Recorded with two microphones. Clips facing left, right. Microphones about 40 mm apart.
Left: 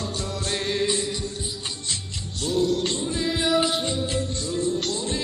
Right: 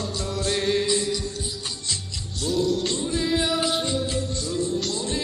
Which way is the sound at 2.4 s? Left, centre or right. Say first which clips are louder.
Left 1 dB; left.